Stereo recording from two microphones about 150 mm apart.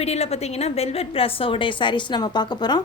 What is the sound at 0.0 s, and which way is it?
A woman's voice, 45° left (ahead or behind).